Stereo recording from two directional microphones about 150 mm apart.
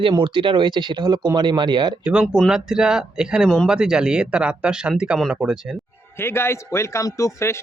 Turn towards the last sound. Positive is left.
turn(degrees=20)  # may be behind; listen again after turning